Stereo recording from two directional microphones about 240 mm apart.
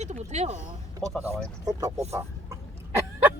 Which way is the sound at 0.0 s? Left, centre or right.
Right.